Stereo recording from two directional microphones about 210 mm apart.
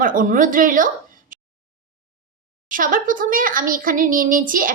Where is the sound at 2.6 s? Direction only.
40° right (ahead or behind).